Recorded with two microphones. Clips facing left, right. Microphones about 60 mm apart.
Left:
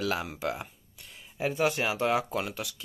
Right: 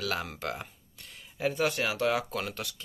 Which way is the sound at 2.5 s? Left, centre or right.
Centre.